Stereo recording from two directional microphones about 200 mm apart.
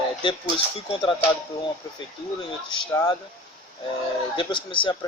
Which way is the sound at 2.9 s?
15° left (ahead or behind).